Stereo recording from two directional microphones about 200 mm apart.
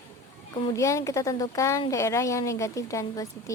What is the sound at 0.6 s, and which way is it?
A woman's voice, 15° left (ahead or behind).